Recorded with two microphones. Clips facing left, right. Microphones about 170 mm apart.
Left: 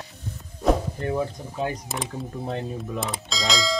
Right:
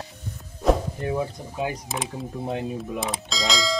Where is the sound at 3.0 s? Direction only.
Centre (ahead or behind).